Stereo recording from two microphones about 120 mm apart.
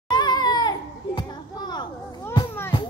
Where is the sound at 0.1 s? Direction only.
35° left (ahead or behind).